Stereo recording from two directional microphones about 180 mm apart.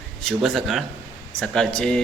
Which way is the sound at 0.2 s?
Centre (ahead or behind).